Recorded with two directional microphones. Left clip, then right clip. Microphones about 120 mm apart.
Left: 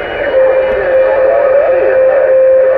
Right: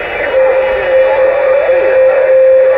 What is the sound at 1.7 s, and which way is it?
Music, 30° right (ahead or behind).